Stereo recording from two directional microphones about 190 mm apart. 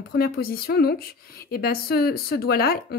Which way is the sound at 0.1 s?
55° left (ahead or behind).